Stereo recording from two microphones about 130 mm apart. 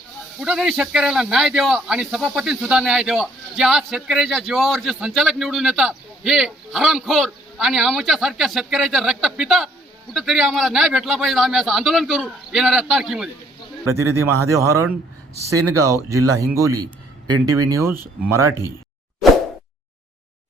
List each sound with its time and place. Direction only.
0.4 s a man's voice: 5° right (ahead or behind)
13.8 s speech: 20° right (ahead or behind)